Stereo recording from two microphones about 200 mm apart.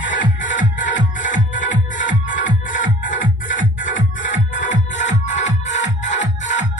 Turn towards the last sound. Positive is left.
turn(degrees=35)  # may be behind; listen again after turning